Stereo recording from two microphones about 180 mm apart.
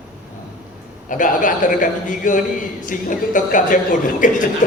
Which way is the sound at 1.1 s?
45° left (ahead or behind).